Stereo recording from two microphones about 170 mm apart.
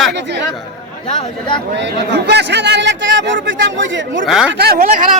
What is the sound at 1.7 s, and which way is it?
A man's voice, 90° right.